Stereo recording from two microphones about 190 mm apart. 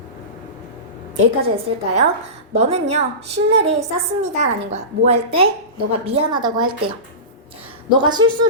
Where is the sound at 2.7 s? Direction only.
35° right (ahead or behind).